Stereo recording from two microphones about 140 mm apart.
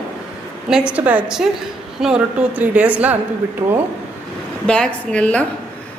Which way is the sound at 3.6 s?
25° right (ahead or behind).